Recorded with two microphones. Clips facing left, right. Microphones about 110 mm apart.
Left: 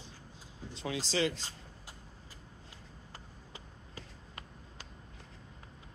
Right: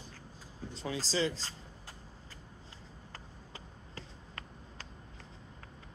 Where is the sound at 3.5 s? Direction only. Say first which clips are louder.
Even; 15° left (ahead or behind).